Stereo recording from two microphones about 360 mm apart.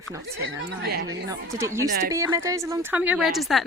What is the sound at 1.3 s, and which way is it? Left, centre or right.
A woman's voice, centre.